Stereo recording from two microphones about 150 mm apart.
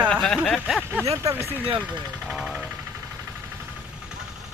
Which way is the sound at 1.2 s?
20° right (ahead or behind).